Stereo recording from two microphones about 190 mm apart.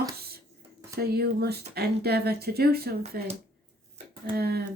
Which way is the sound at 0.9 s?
55° right (ahead or behind).